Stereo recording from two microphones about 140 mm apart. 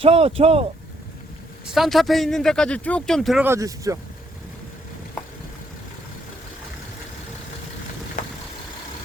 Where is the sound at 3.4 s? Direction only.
20° right (ahead or behind).